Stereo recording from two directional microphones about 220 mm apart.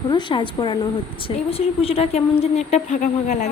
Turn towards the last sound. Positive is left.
turn(degrees=35)  # may be behind; listen again after turning